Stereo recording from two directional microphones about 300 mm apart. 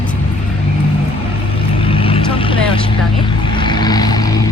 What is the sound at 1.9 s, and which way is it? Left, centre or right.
Vehicle, centre.